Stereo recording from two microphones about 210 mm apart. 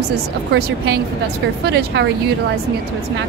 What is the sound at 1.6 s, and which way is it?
Speech, 55° right (ahead or behind).